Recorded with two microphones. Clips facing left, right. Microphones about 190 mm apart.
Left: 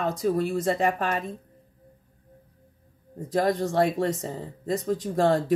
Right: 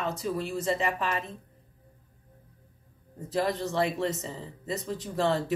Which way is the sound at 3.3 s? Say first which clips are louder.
Left 5 dB; 40° left (ahead or behind).